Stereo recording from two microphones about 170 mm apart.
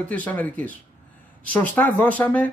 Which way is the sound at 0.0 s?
10° left (ahead or behind).